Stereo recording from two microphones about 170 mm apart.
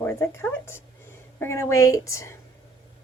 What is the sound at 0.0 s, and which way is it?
A woman's voice, 15° left (ahead or behind).